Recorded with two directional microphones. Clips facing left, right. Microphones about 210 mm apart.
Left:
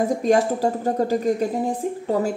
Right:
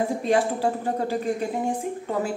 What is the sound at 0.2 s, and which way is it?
Speech, 40° left (ahead or behind).